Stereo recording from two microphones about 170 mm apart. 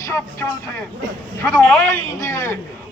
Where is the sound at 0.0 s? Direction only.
15° left (ahead or behind).